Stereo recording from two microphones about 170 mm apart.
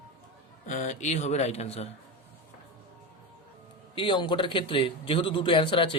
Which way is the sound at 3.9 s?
30° left (ahead or behind).